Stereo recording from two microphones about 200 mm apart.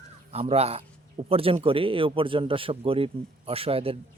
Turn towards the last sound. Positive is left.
turn(degrees=-30)  # may be behind; listen again after turning